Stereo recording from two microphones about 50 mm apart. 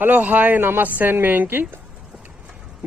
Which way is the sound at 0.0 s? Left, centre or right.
Right.